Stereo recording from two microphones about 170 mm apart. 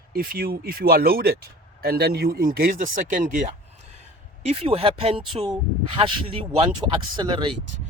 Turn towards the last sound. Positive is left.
turn(degrees=-30)  # may be behind; listen again after turning